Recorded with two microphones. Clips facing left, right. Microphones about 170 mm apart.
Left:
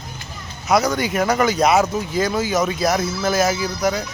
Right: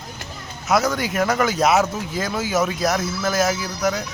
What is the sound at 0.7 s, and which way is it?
Speech, centre (ahead or behind).